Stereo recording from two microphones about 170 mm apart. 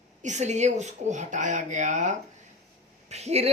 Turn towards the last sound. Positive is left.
turn(degrees=-40)  # may be behind; listen again after turning